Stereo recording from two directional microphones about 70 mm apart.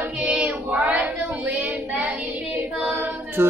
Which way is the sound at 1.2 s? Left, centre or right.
Right.